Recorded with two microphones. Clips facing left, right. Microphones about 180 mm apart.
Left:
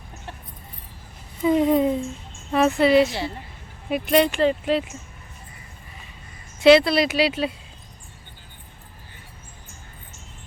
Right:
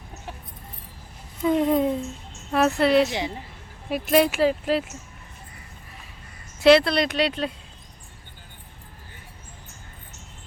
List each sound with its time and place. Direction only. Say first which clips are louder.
1.4 s speech: left 2 dB; centre (ahead or behind)
3.1 s a woman's voice: right 1 dB; 15° right (ahead or behind)
3.8 s speech: left 1 dB; centre (ahead or behind)
6.6 s speech: left 2 dB; centre (ahead or behind)